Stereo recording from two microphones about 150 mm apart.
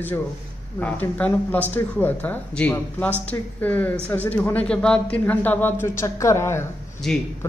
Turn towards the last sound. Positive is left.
turn(degrees=0)  # may be behind; listen again after turning